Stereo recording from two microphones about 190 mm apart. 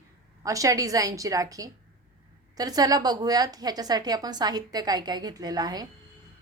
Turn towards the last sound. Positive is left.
turn(degrees=-20)  # may be behind; listen again after turning